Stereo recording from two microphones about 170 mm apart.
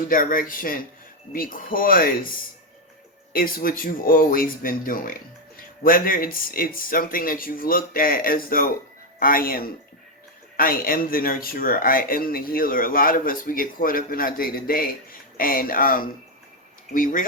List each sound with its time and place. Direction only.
0.1 s speech: 55° left (ahead or behind)
3.3 s speech: 60° left (ahead or behind)